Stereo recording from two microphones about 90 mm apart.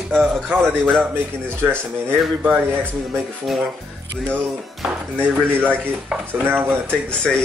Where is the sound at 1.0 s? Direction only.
25° right (ahead or behind).